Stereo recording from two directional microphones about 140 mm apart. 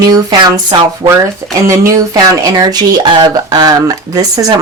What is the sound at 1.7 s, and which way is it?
Speech, 20° right (ahead or behind).